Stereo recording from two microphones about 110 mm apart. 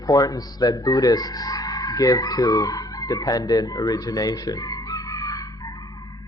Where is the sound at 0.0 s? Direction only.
35° left (ahead or behind).